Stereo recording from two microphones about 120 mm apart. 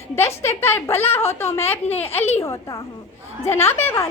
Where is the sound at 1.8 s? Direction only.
60° left (ahead or behind).